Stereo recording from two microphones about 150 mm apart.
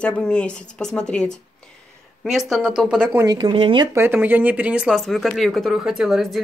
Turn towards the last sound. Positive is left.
turn(degrees=0)  # may be behind; listen again after turning